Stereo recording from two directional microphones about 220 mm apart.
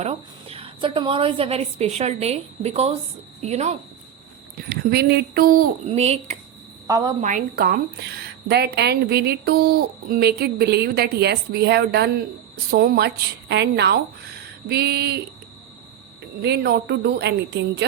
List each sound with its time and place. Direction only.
0.0 s a woman's voice: 25° right (ahead or behind)
4.7 s speech: 45° right (ahead or behind)
5.9 s a woman's voice: 30° right (ahead or behind)
6.8 s a woman's voice: 15° right (ahead or behind)
7.2 s speech: 35° right (ahead or behind)
16.2 s speech: 50° right (ahead or behind)